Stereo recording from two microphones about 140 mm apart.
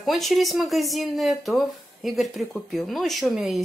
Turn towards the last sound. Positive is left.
turn(degrees=0)  # may be behind; listen again after turning